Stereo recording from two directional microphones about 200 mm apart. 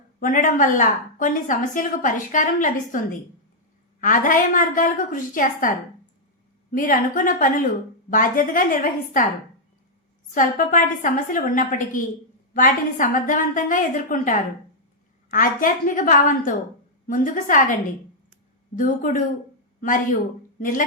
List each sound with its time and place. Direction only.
0.2 s a woman's voice: 40° left (ahead or behind)
4.0 s a woman's voice: 40° left (ahead or behind)
10.3 s a woman's voice: 40° left (ahead or behind)
18.8 s a woman's voice: 40° left (ahead or behind)
20.6 s speech: 40° left (ahead or behind)